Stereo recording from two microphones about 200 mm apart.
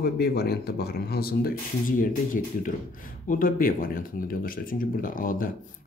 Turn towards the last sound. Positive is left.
turn(degrees=45)  # may be behind; listen again after turning